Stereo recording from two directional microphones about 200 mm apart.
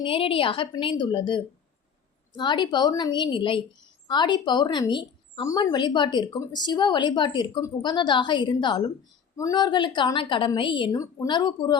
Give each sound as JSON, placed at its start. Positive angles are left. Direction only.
{"t": 0.0, "sound": "a woman's voice", "side_deg": 25}